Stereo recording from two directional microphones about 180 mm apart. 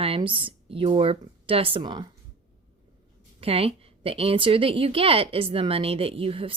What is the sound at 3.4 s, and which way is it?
A woman's voice, 30° right (ahead or behind).